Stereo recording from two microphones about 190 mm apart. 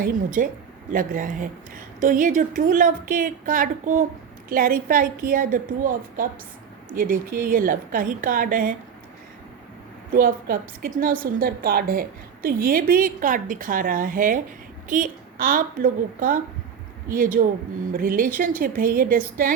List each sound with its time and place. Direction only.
0.0 s a woman's voice: 45° right (ahead or behind)
10.1 s a woman's voice: 45° right (ahead or behind)